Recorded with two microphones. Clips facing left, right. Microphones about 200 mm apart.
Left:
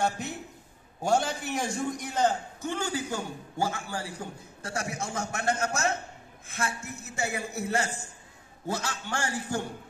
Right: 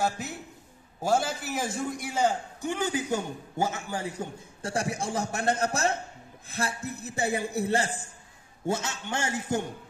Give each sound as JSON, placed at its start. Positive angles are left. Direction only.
{"t": 0.0, "sound": "a man's voice", "side_deg": 0}